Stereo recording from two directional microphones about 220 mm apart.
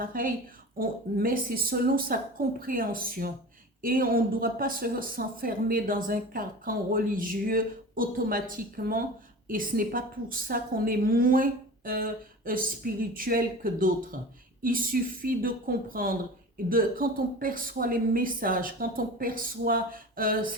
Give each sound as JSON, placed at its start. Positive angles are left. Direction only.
{"t": 0.0, "sound": "speech", "side_deg": -40}